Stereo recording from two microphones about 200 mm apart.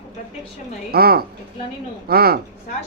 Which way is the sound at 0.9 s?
50° right (ahead or behind).